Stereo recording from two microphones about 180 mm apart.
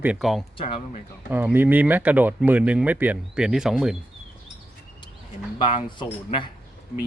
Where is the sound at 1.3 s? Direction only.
10° right (ahead or behind).